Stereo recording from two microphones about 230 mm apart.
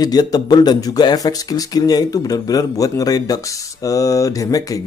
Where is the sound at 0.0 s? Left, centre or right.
Centre.